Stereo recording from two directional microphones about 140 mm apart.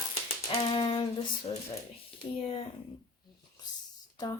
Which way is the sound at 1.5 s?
40° left (ahead or behind).